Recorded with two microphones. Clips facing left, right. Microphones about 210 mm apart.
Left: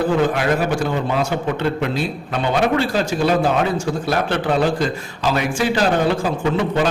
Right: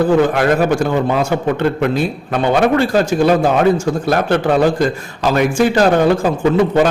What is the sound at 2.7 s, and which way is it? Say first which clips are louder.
Speech: right 5 dB; 50° right (ahead or behind).